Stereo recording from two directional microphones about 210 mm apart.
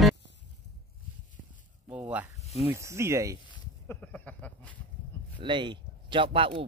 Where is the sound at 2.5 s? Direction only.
10° right (ahead or behind).